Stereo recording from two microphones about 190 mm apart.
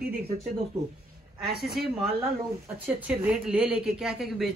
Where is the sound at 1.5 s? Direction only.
Centre (ahead or behind).